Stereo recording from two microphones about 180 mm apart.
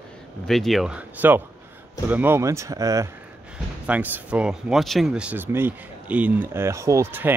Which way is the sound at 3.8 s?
10° right (ahead or behind).